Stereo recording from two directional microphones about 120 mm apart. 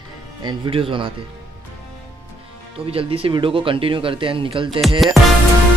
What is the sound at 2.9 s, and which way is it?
Speech, 50° right (ahead or behind).